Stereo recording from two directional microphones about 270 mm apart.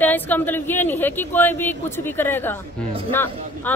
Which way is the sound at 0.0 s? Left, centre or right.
Centre.